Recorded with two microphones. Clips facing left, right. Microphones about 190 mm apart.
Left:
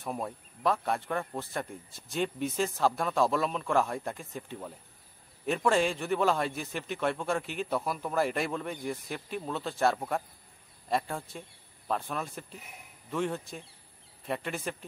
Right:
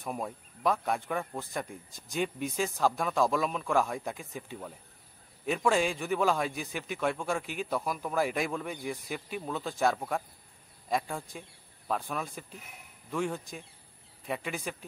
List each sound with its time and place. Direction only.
0.0 s a man's voice: centre (ahead or behind)